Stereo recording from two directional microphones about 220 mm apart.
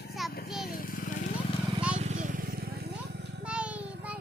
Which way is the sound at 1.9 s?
35° right (ahead or behind).